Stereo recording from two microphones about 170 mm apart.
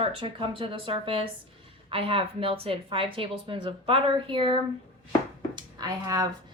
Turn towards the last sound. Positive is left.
turn(degrees=-20)  # may be behind; listen again after turning